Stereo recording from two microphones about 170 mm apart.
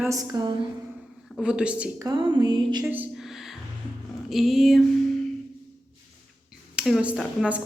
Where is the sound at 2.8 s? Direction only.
10° right (ahead or behind).